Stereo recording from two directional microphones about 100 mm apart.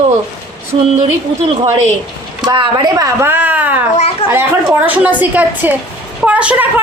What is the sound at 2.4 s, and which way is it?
Speech, 55° right (ahead or behind).